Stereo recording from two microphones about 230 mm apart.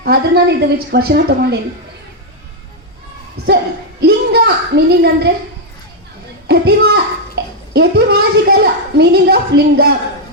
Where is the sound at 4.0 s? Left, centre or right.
Right.